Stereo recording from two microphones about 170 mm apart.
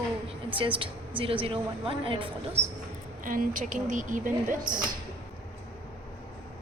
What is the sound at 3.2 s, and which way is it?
Speech, 55° right (ahead or behind).